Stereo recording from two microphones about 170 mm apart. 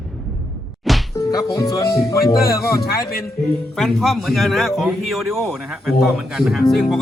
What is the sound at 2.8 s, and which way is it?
Speech, 60° left (ahead or behind).